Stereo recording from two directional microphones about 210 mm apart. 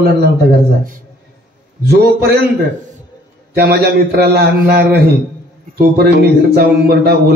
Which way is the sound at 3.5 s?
50° right (ahead or behind).